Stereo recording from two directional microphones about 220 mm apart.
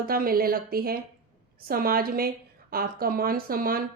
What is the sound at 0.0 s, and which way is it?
A woman's voice, 40° right (ahead or behind).